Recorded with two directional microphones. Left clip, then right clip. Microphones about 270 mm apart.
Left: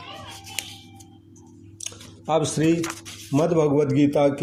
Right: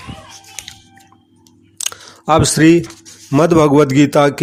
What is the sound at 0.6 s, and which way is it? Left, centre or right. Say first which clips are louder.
Chewing: right 1 dB; centre.